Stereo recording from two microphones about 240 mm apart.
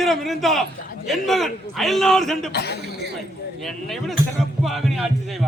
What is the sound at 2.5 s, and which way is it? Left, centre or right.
Speech, left.